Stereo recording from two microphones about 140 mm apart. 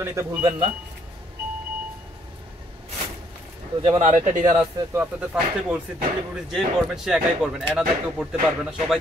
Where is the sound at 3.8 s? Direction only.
55° right (ahead or behind).